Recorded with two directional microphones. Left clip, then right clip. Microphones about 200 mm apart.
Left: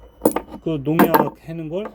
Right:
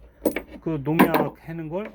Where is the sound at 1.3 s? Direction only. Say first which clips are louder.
Left 3 dB; 20° left (ahead or behind).